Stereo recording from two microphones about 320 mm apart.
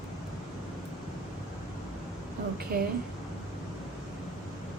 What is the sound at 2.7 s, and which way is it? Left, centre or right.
Speech, right.